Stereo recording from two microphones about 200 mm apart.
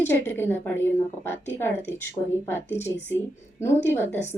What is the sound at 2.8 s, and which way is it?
Speech, 35° left (ahead or behind).